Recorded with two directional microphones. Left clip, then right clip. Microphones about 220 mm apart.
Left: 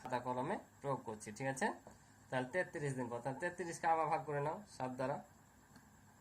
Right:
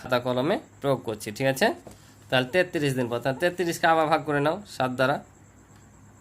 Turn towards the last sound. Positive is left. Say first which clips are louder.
# right 17 dB
turn(degrees=-60)  # may be behind; listen again after turning